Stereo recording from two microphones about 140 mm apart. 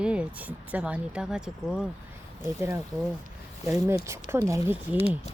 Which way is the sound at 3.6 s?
20° right (ahead or behind).